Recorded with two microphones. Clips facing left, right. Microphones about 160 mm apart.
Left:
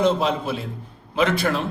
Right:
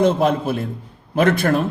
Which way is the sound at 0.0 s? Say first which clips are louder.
Right 4 dB; 50° right (ahead or behind).